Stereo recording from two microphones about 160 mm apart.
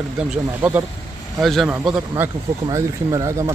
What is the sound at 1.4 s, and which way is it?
Speech, centre (ahead or behind).